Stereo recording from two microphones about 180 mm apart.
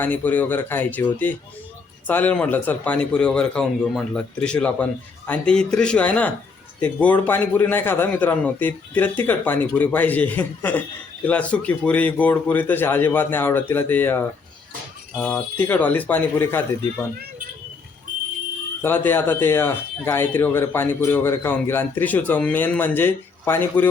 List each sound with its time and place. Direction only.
0.0 s speech: 10° left (ahead or behind)
18.8 s speech: 10° left (ahead or behind)